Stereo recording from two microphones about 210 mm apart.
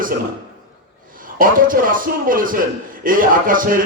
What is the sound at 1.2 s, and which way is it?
A man's voice, 40° right (ahead or behind).